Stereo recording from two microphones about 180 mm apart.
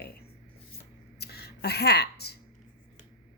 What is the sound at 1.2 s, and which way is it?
Speech, 65° left (ahead or behind).